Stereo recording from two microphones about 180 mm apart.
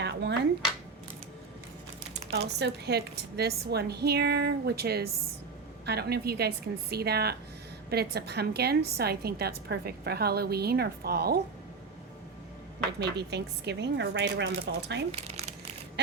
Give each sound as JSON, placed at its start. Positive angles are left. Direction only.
{"t": 0.0, "sound": "a sound", "side_deg": -75}
{"t": 2.3, "sound": "a woman's voice", "side_deg": -65}
{"t": 13.0, "sound": "speech", "side_deg": -70}
{"t": 15.1, "sound": "crumpling", "side_deg": -35}